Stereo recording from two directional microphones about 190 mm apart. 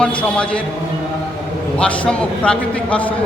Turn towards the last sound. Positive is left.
turn(degrees=5)  # may be behind; listen again after turning